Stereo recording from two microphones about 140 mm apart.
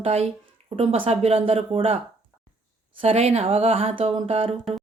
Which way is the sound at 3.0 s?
45° right (ahead or behind).